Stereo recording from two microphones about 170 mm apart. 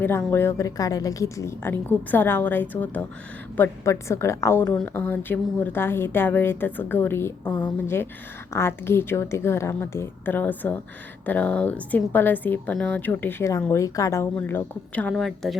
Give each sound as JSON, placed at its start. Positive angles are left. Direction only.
{"t": 0.0, "sound": "a woman's voice", "side_deg": 15}
{"t": 8.5, "sound": "a woman's voice", "side_deg": 15}